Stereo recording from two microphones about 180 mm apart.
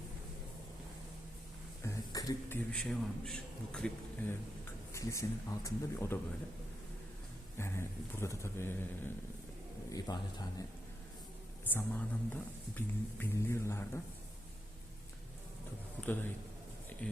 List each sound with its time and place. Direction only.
1.8 s a sound: 15° left (ahead or behind)
2.7 s a man's voice: 5° left (ahead or behind)
4.9 s speech: 20° left (ahead or behind)
7.6 s speech: 15° left (ahead or behind)
10.1 s a man's voice: 25° left (ahead or behind)
11.7 s speech: 10° left (ahead or behind)
16.0 s speech: 10° left (ahead or behind)